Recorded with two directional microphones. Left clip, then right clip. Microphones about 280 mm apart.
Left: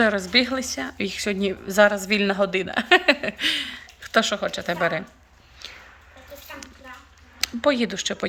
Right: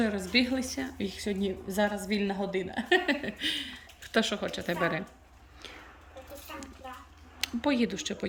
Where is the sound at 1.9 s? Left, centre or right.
Left.